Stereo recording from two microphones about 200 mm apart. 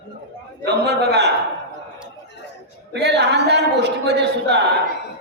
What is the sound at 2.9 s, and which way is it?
A man's voice, 55° right (ahead or behind).